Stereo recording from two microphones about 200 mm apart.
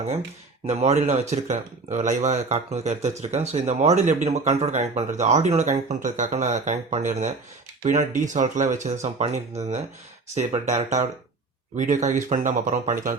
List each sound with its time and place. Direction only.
0.7 s speech: 35° right (ahead or behind)
10.8 s speech: 35° right (ahead or behind)